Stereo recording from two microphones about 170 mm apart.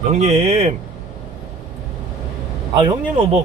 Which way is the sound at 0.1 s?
40° right (ahead or behind).